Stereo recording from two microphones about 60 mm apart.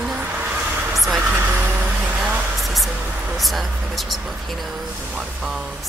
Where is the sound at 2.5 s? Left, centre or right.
Centre.